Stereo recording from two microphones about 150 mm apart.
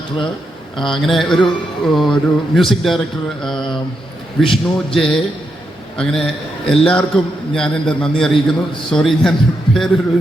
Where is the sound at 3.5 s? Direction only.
30° left (ahead or behind).